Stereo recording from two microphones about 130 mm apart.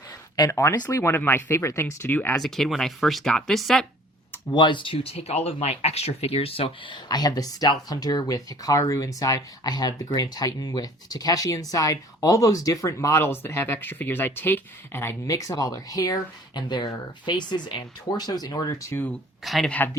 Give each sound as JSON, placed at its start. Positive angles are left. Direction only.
{"t": 0.3, "sound": "speech", "side_deg": 25}
{"t": 2.3, "sound": "speech", "side_deg": 0}
{"t": 4.5, "sound": "speech", "side_deg": 35}
{"t": 19.5, "sound": "speech", "side_deg": 0}